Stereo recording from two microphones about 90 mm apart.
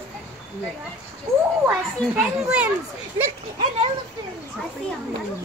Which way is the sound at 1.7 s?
10° right (ahead or behind).